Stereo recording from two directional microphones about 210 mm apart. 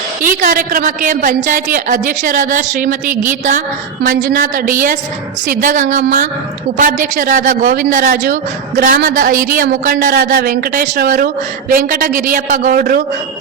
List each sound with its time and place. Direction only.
0.2 s a woman's voice: 40° right (ahead or behind)